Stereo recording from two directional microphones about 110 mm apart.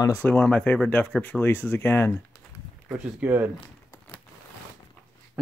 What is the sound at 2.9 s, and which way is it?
Speech, 15° right (ahead or behind).